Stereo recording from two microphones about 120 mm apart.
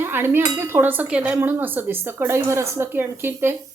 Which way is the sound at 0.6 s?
20° right (ahead or behind).